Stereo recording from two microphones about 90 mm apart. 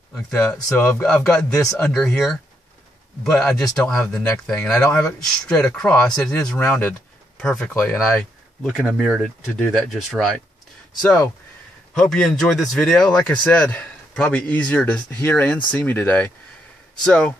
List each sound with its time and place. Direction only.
0.1 s speech: 15° left (ahead or behind)
2.0 s speech: 30° left (ahead or behind)
3.3 s speech: 5° left (ahead or behind)
8.9 s speech: 5° right (ahead or behind)
9.6 s speech: 10° left (ahead or behind)